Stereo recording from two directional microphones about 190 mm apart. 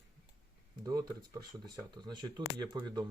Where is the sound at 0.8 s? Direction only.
20° right (ahead or behind).